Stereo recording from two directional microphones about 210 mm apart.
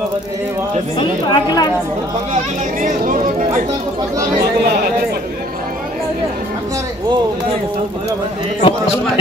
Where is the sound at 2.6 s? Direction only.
40° right (ahead or behind).